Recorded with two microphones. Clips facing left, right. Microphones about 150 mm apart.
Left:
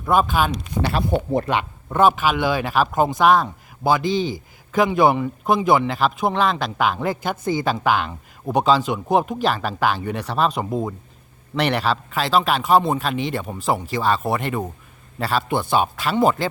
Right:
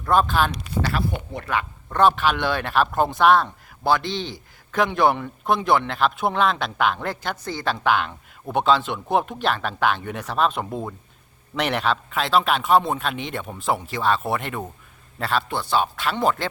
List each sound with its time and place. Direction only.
0.0 s speech: 10° left (ahead or behind)
0.8 s speech: 20° left (ahead or behind)
1.1 s speech: 40° left (ahead or behind)
1.9 s speech: 10° left (ahead or behind)